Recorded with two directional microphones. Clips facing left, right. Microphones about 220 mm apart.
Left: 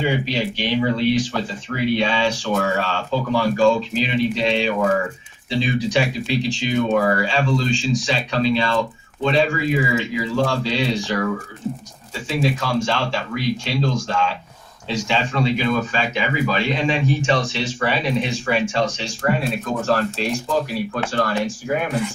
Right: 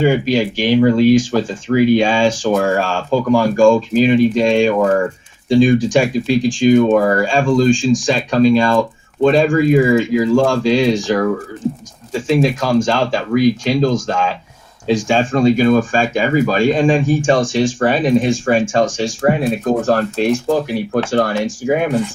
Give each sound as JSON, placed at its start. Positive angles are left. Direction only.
{"t": 0.0, "sound": "speech", "side_deg": -45}
{"t": 12.4, "sound": "speech", "side_deg": -45}